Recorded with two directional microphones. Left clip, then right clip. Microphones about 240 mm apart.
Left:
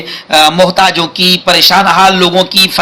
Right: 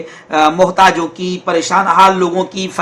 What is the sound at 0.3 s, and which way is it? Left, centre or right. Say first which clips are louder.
Speech: left 4 dB; left.